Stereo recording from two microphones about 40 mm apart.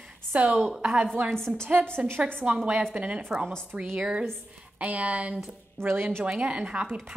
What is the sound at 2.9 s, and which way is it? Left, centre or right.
A woman's voice, right.